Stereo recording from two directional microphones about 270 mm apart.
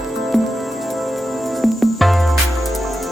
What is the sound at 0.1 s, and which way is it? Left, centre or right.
Music, centre.